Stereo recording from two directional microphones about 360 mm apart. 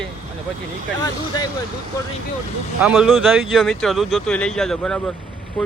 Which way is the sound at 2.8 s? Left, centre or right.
Centre.